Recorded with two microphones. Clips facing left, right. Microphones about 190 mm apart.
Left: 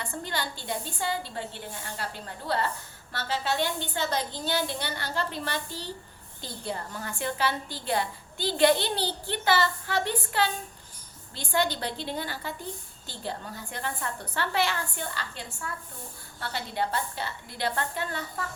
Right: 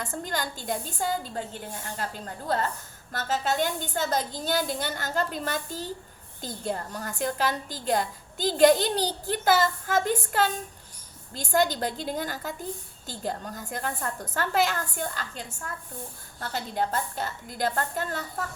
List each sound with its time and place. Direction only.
0.0 s a woman's voice: 45° right (ahead or behind)